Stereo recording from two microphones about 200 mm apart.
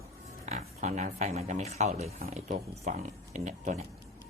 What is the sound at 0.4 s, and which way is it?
Speech, 35° right (ahead or behind).